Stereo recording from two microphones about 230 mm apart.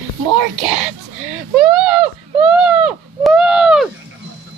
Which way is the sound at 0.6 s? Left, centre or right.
Centre.